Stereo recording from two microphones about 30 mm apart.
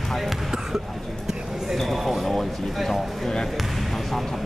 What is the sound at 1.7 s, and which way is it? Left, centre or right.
Speech, centre.